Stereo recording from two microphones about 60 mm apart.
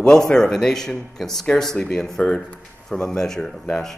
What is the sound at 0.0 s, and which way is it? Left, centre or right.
Speech, centre.